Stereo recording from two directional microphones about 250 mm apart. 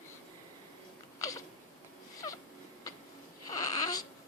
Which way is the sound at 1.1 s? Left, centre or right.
Centre.